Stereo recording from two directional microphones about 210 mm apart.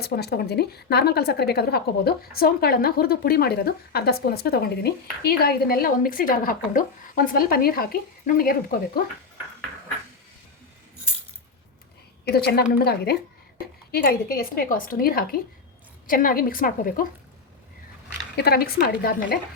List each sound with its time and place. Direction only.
0.0 s a woman's voice: 50° left (ahead or behind)
12.3 s a woman's voice: 50° left (ahead or behind)
18.3 s a woman's voice: 50° left (ahead or behind)